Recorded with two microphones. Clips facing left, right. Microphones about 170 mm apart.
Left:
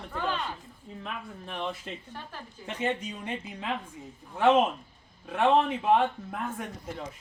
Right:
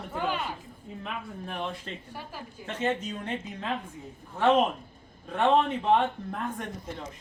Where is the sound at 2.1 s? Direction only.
10° right (ahead or behind).